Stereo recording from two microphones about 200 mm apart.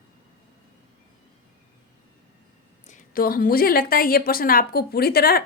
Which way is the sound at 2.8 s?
40° left (ahead or behind).